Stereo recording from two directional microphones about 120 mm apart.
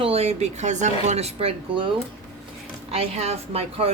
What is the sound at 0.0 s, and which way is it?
Speech, 60° right (ahead or behind).